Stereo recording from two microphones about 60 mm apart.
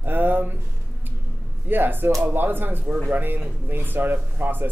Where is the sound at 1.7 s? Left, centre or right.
Right.